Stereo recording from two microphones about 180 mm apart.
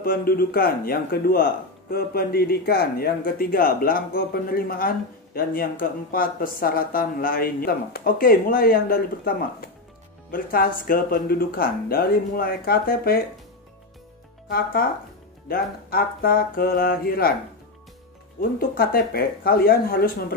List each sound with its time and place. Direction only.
0.0 s speech: 55° left (ahead or behind)
14.5 s speech: 55° left (ahead or behind)
18.4 s speech: 50° left (ahead or behind)